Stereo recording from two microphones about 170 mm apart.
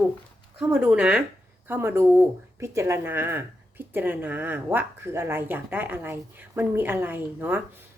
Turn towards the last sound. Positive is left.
turn(degrees=-10)  # may be behind; listen again after turning